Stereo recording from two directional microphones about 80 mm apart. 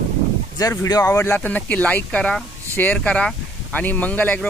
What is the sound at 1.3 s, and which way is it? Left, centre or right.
Speech, centre.